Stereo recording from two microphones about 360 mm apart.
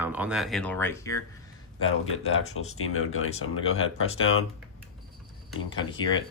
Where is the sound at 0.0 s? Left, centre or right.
Centre.